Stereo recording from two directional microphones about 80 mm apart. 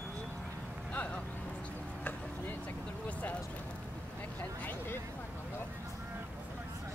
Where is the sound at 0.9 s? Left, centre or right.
Centre.